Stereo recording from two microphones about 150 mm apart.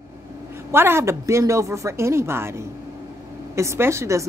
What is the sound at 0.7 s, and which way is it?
Speech, 15° right (ahead or behind).